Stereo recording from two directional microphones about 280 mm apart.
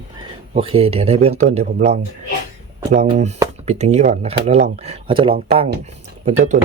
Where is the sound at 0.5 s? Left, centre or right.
Centre.